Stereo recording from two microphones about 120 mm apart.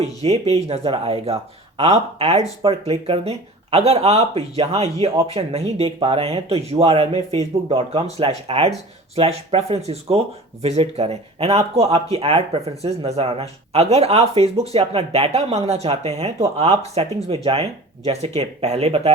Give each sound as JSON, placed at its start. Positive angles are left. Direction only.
{"t": 0.0, "sound": "speech", "side_deg": -60}